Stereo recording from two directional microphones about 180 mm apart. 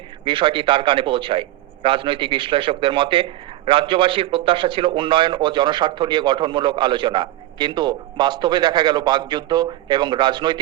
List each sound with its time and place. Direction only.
0.3 s a man's voice: 30° right (ahead or behind)